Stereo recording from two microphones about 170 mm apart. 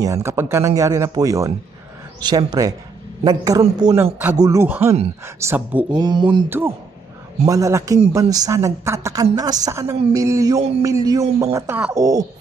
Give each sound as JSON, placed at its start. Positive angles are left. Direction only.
{"t": 0.0, "sound": "a woman's voice", "side_deg": -20}
{"t": 5.9, "sound": "a woman's voice", "side_deg": -25}
{"t": 7.4, "sound": "a woman's voice", "side_deg": -20}